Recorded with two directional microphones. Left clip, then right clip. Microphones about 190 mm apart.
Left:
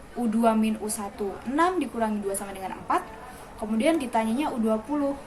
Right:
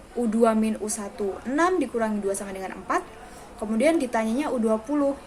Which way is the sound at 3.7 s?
15° right (ahead or behind).